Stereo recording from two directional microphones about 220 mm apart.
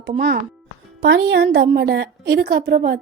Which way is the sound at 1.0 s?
50° right (ahead or behind).